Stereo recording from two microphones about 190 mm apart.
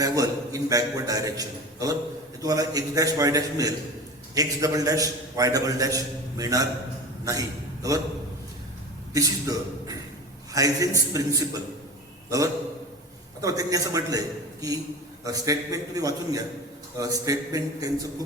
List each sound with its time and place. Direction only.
0.0 s a man's voice: 20° right (ahead or behind)
9.1 s a man's voice: 20° right (ahead or behind)
13.4 s a man's voice: 20° right (ahead or behind)